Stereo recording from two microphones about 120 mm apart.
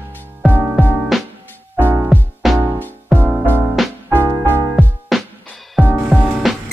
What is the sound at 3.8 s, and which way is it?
Music, centre (ahead or behind).